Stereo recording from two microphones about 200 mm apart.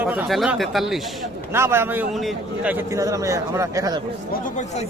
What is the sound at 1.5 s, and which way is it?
A man's voice, 10° right (ahead or behind).